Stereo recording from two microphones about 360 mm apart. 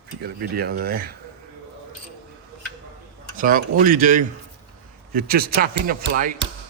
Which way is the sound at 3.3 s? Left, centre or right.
Right.